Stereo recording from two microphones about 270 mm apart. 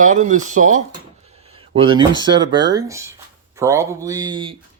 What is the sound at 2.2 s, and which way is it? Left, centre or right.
Speech, centre.